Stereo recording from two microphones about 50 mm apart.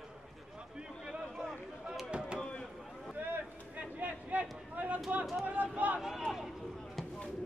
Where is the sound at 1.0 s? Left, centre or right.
Centre.